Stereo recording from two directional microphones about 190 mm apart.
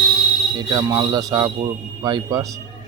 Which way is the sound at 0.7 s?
15° right (ahead or behind).